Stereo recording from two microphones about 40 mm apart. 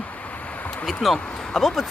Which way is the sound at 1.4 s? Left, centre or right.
Centre.